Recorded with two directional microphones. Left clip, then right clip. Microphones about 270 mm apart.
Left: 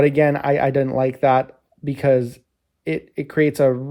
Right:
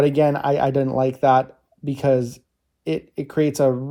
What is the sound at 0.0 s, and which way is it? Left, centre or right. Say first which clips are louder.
Speech: left 1 dB; left.